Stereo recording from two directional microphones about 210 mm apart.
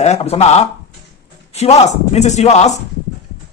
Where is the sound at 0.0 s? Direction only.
30° left (ahead or behind).